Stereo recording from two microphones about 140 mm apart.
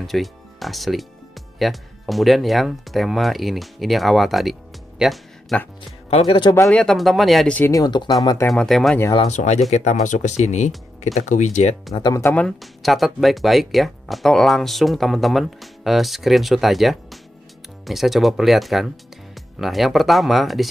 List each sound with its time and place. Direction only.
0.0 s speech: centre (ahead or behind)
6.0 s speech: 45° left (ahead or behind)
6.7 s speech: 5° left (ahead or behind)
7.7 s speech: 30° left (ahead or behind)
8.5 s speech: centre (ahead or behind)
9.3 s speech: 55° left (ahead or behind)
11.9 s speech: 25° left (ahead or behind)
12.4 s speech: centre (ahead or behind)